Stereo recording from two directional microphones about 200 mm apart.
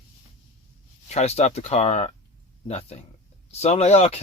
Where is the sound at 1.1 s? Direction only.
30° left (ahead or behind).